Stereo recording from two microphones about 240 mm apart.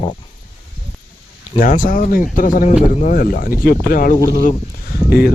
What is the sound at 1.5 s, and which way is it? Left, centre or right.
Speech, left.